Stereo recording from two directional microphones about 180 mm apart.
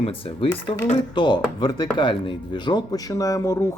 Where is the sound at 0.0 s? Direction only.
30° left (ahead or behind).